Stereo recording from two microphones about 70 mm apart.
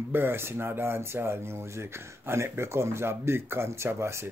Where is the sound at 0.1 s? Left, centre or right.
Right.